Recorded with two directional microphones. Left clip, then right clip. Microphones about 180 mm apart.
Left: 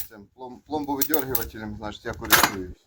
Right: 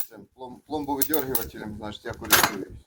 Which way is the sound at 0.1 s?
15° right (ahead or behind).